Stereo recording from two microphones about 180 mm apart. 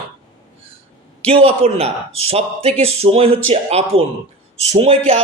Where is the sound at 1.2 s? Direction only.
35° right (ahead or behind).